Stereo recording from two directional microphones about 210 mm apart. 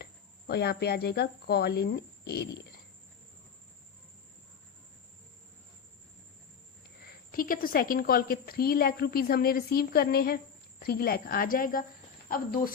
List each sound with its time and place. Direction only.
0.0 s speech: 50° left (ahead or behind)
7.0 s a woman's voice: 45° left (ahead or behind)